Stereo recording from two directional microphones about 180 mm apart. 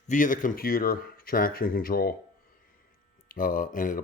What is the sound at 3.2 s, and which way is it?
Speech, 50° left (ahead or behind).